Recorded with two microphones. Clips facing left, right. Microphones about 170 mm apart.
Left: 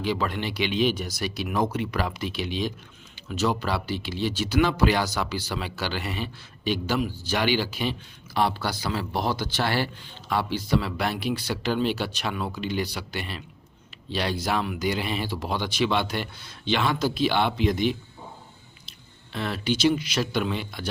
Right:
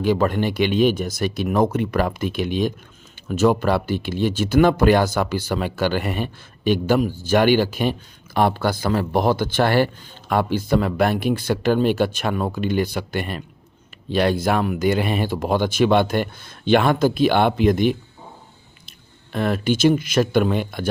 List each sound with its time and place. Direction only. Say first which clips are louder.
0.0 s speech: right 8 dB; 50° right (ahead or behind)